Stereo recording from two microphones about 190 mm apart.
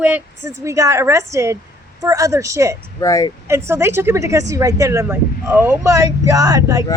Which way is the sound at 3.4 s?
15° right (ahead or behind).